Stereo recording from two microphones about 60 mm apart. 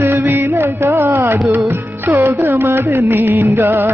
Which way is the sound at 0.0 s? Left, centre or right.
Right.